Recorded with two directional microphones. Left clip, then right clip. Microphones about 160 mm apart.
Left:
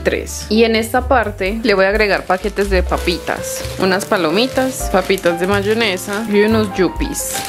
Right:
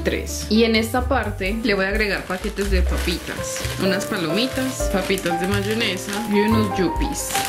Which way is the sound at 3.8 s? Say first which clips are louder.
Left 8 dB; 15° left (ahead or behind).